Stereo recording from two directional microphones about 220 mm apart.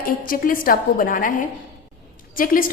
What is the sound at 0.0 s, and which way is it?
A woman's voice, 40° left (ahead or behind).